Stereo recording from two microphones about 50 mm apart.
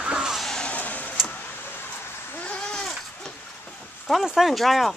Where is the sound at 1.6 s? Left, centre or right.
Left.